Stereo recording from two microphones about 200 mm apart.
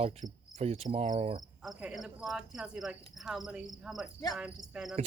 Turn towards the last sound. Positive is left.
turn(degrees=0)  # may be behind; listen again after turning